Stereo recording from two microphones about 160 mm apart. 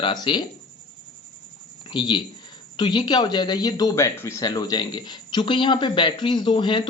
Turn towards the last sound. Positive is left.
turn(degrees=30)  # may be behind; listen again after turning